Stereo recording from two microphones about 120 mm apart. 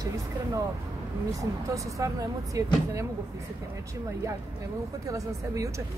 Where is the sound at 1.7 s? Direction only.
30° right (ahead or behind).